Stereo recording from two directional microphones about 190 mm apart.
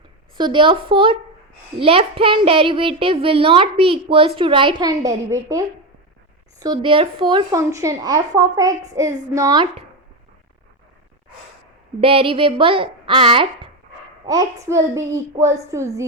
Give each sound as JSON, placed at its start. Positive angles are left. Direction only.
{"t": 0.3, "sound": "a child's voice", "side_deg": -25}
{"t": 11.9, "sound": "a child's voice", "side_deg": -30}